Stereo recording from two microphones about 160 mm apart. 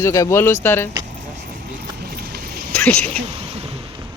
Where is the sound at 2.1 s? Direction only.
75° right (ahead or behind).